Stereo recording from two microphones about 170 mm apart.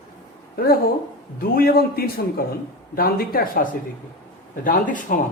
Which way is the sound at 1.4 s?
60° left (ahead or behind).